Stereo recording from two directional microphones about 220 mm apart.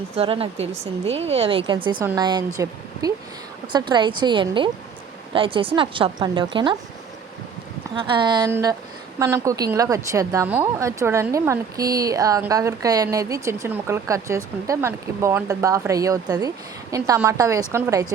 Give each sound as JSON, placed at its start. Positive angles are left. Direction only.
{"t": 0.2, "sound": "a woman's voice", "side_deg": -25}
{"t": 3.7, "sound": "a woman's voice", "side_deg": -20}
{"t": 7.9, "sound": "a woman's voice", "side_deg": -20}